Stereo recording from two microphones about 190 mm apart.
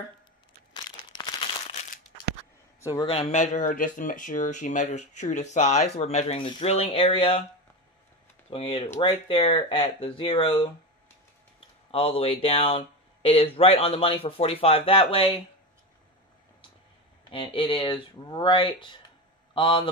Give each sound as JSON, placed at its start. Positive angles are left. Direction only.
{"t": 0.7, "sound": "crumpling", "side_deg": 20}
{"t": 2.8, "sound": "speech", "side_deg": 20}
{"t": 8.5, "sound": "speech", "side_deg": 30}
{"t": 11.9, "sound": "speech", "side_deg": 30}
{"t": 17.3, "sound": "a man's voice", "side_deg": 25}